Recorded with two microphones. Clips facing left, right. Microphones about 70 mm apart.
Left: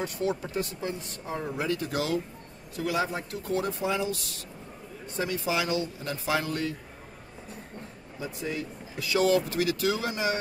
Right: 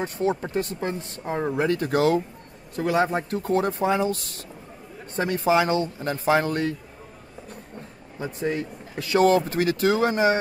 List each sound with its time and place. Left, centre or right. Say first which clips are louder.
0.0 s speech: right 5 dB; right
8.2 s speech: right 6 dB; right